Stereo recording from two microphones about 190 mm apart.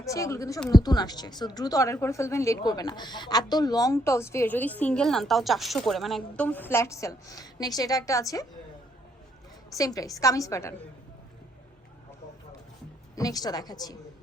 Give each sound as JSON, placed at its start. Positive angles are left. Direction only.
{"t": 0.0, "sound": "a woman's voice", "side_deg": 15}
{"t": 9.7, "sound": "a woman's voice", "side_deg": 20}
{"t": 13.1, "sound": "a woman's voice", "side_deg": 20}